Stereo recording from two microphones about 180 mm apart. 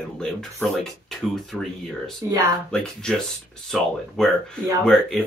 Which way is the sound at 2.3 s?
20° right (ahead or behind).